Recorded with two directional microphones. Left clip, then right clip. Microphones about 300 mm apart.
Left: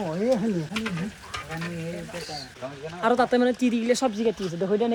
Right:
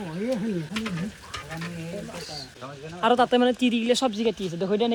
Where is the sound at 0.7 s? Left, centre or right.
Centre.